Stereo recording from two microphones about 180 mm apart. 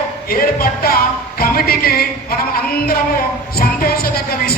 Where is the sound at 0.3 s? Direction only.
55° left (ahead or behind).